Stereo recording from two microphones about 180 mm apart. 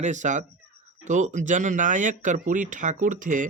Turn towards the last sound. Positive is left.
turn(degrees=-45)  # may be behind; listen again after turning